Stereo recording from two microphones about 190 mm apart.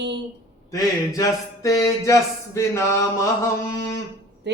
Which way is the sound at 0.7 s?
20° left (ahead or behind).